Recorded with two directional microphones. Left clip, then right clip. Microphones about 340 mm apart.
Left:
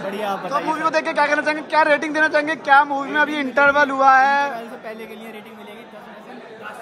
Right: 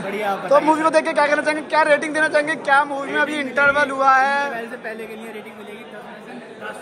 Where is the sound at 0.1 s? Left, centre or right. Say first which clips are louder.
Right 3 dB; centre.